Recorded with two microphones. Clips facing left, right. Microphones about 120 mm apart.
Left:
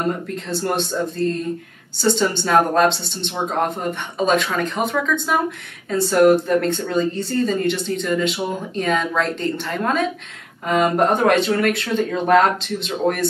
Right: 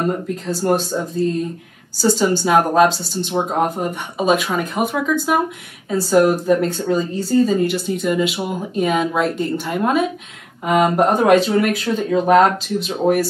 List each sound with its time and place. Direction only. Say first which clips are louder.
0.5 s speech: right 4 dB; centre (ahead or behind)